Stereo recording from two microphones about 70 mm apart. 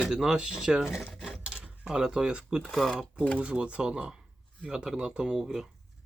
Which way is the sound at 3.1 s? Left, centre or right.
Centre.